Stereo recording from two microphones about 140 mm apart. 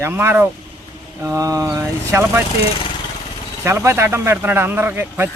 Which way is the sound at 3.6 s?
20° right (ahead or behind).